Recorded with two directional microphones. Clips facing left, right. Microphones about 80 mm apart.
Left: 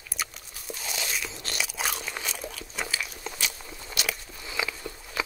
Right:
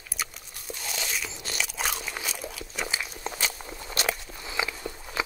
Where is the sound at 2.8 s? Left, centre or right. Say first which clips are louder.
Right 1 dB; right.